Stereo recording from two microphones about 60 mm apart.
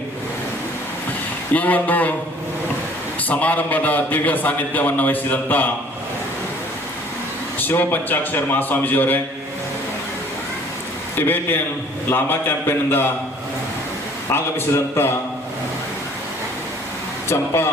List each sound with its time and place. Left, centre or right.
1.5 s a man's voice: left
3.2 s a man's voice: left
7.6 s a man's voice: left
11.2 s a man's voice: left
14.3 s a man's voice: left
17.2 s a man's voice: left